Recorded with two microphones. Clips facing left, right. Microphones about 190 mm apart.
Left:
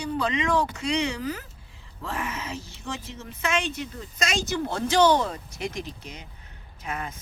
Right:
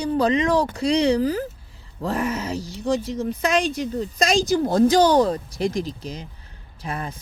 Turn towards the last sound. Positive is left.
turn(degrees=-35)  # may be behind; listen again after turning